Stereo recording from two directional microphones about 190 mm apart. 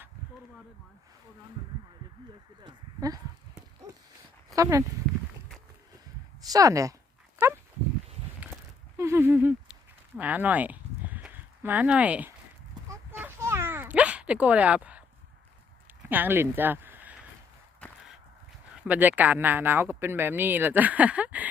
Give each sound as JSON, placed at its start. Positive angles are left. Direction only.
{"t": 2.6, "sound": "speech", "side_deg": -20}
{"t": 4.4, "sound": "speech", "side_deg": -15}
{"t": 6.4, "sound": "speech", "side_deg": -20}
{"t": 7.3, "sound": "dog", "side_deg": -15}
{"t": 9.0, "sound": "speech", "side_deg": -15}
{"t": 13.1, "sound": "dog", "side_deg": -10}
{"t": 16.0, "sound": "speech", "side_deg": -10}
{"t": 17.8, "sound": "a sound", "side_deg": 5}
{"t": 18.8, "sound": "speech", "side_deg": -10}